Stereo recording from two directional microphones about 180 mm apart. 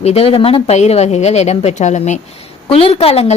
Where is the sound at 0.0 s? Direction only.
35° left (ahead or behind).